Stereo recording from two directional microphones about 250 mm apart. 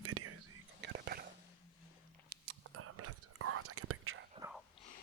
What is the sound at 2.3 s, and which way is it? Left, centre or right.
Whispering, right.